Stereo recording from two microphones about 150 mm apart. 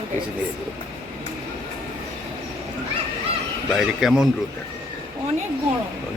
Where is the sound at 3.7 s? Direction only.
Centre (ahead or behind).